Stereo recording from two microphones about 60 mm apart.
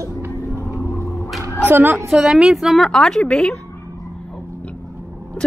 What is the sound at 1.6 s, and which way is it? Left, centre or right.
Speech, right.